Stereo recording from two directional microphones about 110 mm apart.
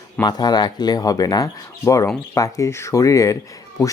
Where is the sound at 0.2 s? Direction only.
40° left (ahead or behind).